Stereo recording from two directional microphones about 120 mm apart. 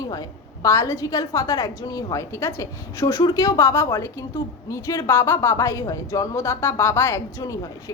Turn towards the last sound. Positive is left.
turn(degrees=30)  # may be behind; listen again after turning